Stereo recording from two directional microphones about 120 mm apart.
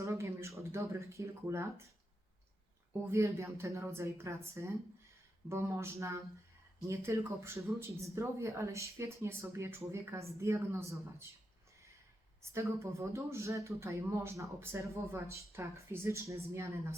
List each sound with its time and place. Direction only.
0.0 s speech: 25° right (ahead or behind)
3.1 s speech: 25° right (ahead or behind)
12.4 s speech: 20° right (ahead or behind)